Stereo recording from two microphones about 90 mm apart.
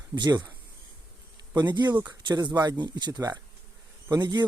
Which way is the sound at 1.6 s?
55° right (ahead or behind).